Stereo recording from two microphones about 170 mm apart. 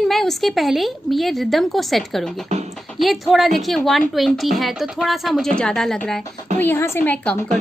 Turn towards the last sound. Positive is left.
turn(degrees=10)  # may be behind; listen again after turning